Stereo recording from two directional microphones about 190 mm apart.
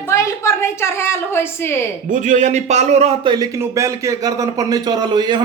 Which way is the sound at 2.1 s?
40° right (ahead or behind).